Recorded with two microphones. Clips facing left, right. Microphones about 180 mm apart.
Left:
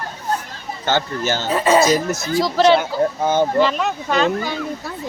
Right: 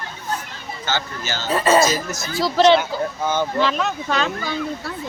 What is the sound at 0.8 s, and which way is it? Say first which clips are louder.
Speech: left 6 dB; 55° left (ahead or behind).